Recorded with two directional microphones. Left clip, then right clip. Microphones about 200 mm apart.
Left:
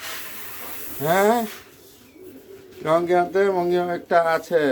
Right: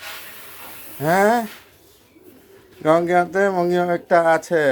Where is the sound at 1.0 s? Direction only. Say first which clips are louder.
Right 2 dB; 50° right (ahead or behind).